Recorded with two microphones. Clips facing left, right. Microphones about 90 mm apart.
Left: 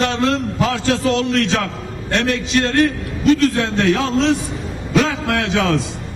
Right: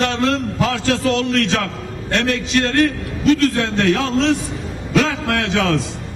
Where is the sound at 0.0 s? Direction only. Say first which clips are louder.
Even; 20° left (ahead or behind).